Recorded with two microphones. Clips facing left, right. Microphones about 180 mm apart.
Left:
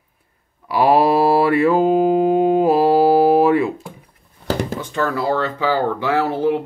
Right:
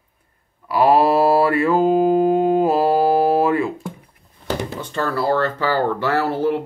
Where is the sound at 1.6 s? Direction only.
15° left (ahead or behind).